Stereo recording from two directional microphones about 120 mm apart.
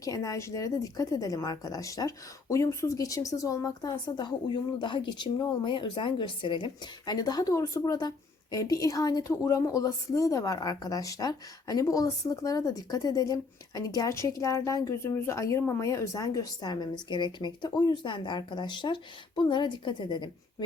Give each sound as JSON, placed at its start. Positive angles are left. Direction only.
{"t": 0.0, "sound": "a woman's voice", "side_deg": 30}